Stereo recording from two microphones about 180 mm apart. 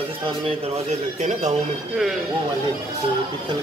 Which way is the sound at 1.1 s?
40° right (ahead or behind).